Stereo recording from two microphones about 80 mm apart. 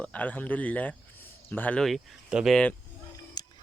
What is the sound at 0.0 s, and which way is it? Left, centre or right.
Speech, centre.